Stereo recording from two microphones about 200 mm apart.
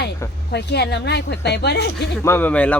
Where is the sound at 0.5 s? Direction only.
55° left (ahead or behind).